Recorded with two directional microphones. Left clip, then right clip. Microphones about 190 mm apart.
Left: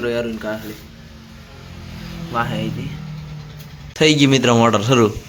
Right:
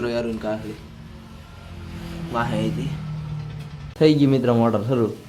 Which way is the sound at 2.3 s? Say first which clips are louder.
Left 3 dB; 5° right (ahead or behind).